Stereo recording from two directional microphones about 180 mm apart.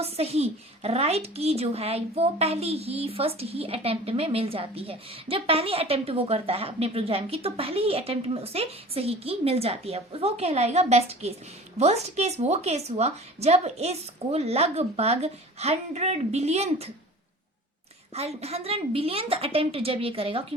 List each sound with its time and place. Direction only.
0.0 s a woman's voice: 35° right (ahead or behind)
18.1 s a woman's voice: 35° right (ahead or behind)